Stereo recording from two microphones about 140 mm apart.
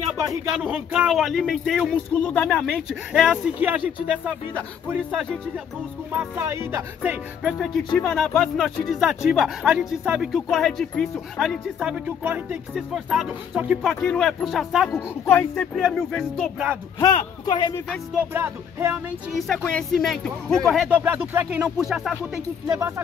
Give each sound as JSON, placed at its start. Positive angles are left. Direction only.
{"t": 0.7, "sound": "speech", "side_deg": -10}
{"t": 6.1, "sound": "speech", "side_deg": -15}
{"t": 7.5, "sound": "speech", "side_deg": 0}
{"t": 11.9, "sound": "speech", "side_deg": -10}
{"t": 14.0, "sound": "speech", "side_deg": 5}
{"t": 14.9, "sound": "speech", "side_deg": 15}
{"t": 15.7, "sound": "speech", "side_deg": 0}
{"t": 17.5, "sound": "speech", "side_deg": 30}
{"t": 18.3, "sound": "speech", "side_deg": -15}
{"t": 19.3, "sound": "speech", "side_deg": 0}
{"t": 21.0, "sound": "speech", "side_deg": -15}
{"t": 22.7, "sound": "speech", "side_deg": -20}